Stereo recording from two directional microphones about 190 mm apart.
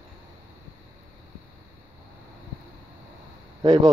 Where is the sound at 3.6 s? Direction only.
25° right (ahead or behind).